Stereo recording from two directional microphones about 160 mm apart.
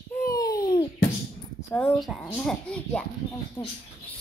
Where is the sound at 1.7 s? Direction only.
10° left (ahead or behind).